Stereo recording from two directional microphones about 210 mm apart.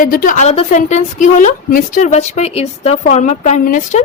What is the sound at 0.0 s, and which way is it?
A woman's voice, 40° left (ahead or behind).